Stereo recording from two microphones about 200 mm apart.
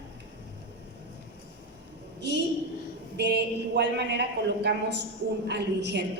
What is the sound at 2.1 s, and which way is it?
A woman's voice, 60° right (ahead or behind).